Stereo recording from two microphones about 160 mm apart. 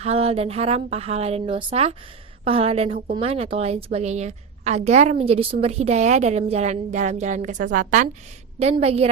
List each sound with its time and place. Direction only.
0.0 s a woman's voice: 40° right (ahead or behind)
8.5 s a woman's voice: 40° right (ahead or behind)